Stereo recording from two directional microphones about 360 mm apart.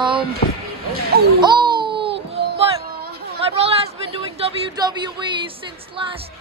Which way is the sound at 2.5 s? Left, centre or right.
Right.